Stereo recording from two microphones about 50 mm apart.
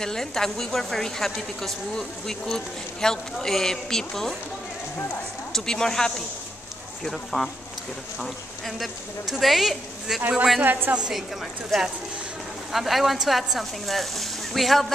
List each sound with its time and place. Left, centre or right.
0.0 s a woman's voice: centre
5.5 s a woman's voice: centre
10.6 s a woman's voice: right
11.0 s a woman's voice: centre
11.7 s speech: centre